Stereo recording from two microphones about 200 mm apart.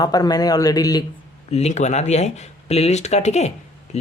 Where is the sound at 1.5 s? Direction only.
30° left (ahead or behind).